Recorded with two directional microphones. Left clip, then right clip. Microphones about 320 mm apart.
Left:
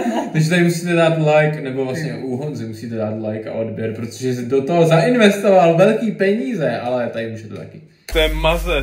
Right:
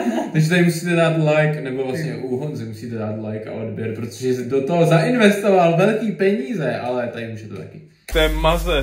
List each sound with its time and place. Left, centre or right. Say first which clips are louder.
0.0 s a man's voice: left 1 dB; centre
4.2 s a man's voice: left 1 dB; centre